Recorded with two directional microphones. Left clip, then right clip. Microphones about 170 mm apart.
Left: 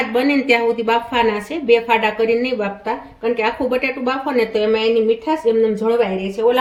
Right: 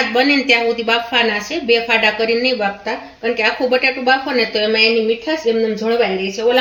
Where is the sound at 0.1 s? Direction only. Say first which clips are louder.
Right 1 dB; 65° left (ahead or behind).